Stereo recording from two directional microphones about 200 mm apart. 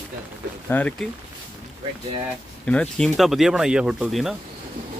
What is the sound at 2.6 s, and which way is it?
Speech, 5° left (ahead or behind).